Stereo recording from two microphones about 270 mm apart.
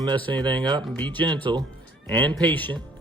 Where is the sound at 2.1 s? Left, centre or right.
Centre.